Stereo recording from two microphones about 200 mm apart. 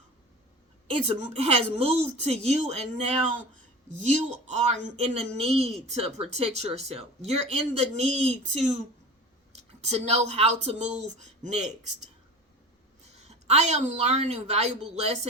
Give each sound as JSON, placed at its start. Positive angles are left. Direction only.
{"t": 0.9, "sound": "speech", "side_deg": -30}
{"t": 9.8, "sound": "speech", "side_deg": -35}
{"t": 13.2, "sound": "speech", "side_deg": -35}